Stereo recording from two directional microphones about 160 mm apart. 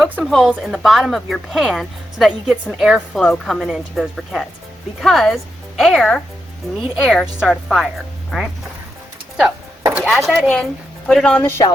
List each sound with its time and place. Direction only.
0.0 s speech: centre (ahead or behind)
9.9 s speech: centre (ahead or behind); by 11.7 s 15° left (ahead or behind)